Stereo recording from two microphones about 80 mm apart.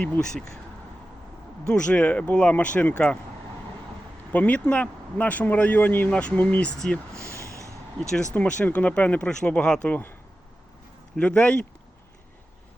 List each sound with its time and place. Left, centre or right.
0.2 s speech: centre
1.6 s speech: centre
4.3 s speech: centre
7.1 s a sound: right
8.1 s speech: centre
11.2 s speech: centre